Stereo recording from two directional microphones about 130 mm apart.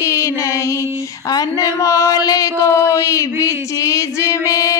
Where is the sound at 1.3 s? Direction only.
25° left (ahead or behind).